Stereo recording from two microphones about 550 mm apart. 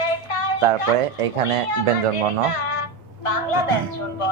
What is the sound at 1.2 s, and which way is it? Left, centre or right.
Speech, right.